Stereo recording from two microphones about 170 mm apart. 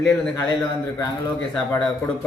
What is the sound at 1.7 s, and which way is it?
Speech, 10° left (ahead or behind).